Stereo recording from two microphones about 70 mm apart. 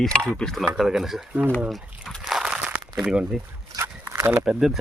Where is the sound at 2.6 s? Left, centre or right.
Centre.